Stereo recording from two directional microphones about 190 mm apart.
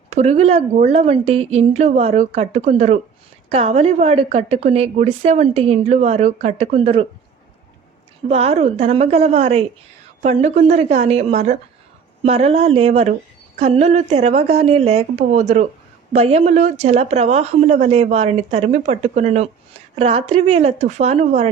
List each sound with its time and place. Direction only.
0.1 s a woman's voice: 35° right (ahead or behind)
8.3 s a woman's voice: 35° right (ahead or behind)